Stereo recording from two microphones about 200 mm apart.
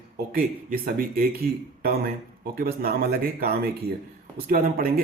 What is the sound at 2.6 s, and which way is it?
Speech, 50° right (ahead or behind).